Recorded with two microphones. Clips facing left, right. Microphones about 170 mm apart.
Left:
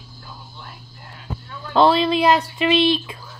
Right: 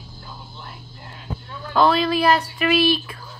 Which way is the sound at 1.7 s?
25° left (ahead or behind).